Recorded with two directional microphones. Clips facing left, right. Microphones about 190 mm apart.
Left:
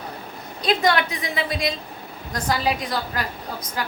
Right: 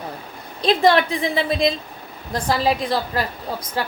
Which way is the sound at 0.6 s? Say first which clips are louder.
Right 4 dB; 30° right (ahead or behind).